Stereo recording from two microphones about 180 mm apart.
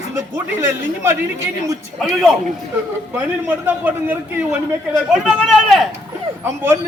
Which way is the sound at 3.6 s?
10° right (ahead or behind).